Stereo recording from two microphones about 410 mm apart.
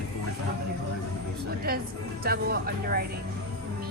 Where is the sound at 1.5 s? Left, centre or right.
Right.